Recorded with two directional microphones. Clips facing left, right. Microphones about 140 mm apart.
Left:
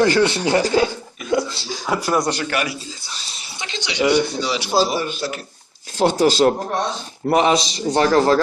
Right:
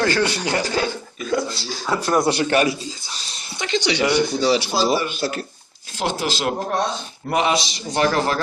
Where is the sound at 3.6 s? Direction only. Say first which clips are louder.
Right 8 dB; 60° right (ahead or behind).